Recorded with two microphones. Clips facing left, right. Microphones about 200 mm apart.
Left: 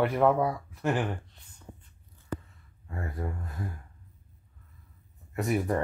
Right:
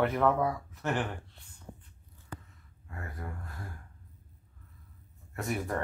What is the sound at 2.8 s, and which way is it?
Speech, 25° left (ahead or behind).